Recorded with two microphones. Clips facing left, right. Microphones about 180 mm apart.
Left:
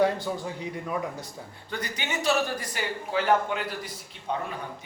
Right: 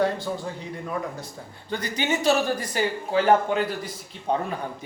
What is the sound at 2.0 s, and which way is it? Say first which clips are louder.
Speech: right 4 dB; 40° right (ahead or behind).